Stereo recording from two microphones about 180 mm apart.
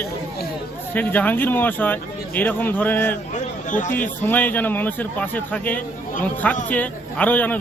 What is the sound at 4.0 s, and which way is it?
Speech, 10° left (ahead or behind).